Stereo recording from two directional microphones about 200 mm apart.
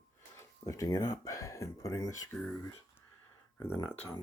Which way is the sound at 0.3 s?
15° left (ahead or behind).